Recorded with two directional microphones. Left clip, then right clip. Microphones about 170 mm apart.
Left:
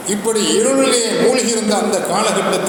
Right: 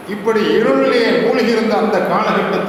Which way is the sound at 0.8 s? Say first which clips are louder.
Right 1 dB; 20° left (ahead or behind).